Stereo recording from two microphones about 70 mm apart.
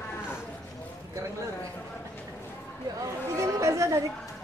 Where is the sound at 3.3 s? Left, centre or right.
Right.